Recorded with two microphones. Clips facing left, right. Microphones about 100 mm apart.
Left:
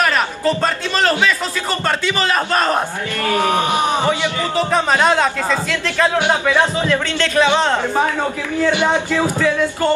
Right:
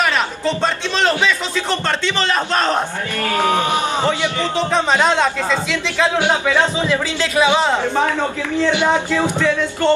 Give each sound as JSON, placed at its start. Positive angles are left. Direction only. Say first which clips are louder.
{"t": 0.0, "sound": "a man's voice", "louder": "left 1 dB", "side_deg": 5}
{"t": 3.5, "sound": "a man's voice", "louder": "left 1 dB", "side_deg": 15}
{"t": 6.9, "sound": "speech", "louder": "left 1 dB", "side_deg": -10}
{"t": 9.4, "sound": "a man's voice", "louder": "left 1 dB", "side_deg": 5}